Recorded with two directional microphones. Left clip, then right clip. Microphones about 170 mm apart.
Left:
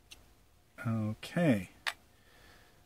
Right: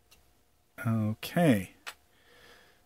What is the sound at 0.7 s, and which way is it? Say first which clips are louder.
Speech: right 4 dB; 50° right (ahead or behind).